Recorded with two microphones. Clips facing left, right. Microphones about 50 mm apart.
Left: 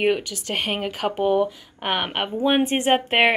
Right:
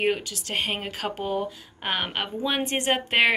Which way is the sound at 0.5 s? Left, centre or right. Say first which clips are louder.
Left 3 dB; centre.